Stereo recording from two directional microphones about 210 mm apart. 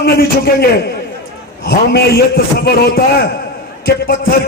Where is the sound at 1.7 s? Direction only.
45° left (ahead or behind).